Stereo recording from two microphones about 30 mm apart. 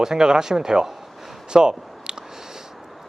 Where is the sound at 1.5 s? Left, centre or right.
Right.